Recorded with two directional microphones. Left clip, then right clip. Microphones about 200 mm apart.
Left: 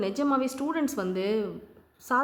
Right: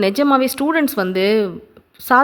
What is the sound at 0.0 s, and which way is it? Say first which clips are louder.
A woman's voice: right 12 dB; 35° right (ahead or behind).